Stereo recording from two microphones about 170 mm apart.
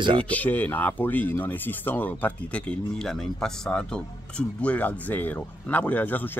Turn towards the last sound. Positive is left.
turn(degrees=10)  # may be behind; listen again after turning